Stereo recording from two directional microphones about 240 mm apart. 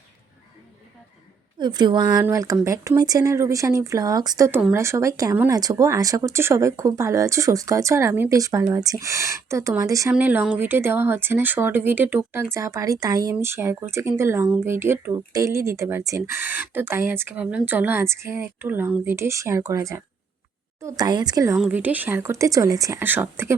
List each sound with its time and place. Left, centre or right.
1.5 s speech: centre